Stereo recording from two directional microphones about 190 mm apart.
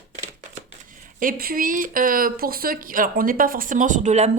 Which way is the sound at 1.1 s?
50° right (ahead or behind).